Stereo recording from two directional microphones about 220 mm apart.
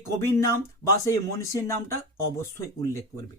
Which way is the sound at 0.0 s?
10° left (ahead or behind).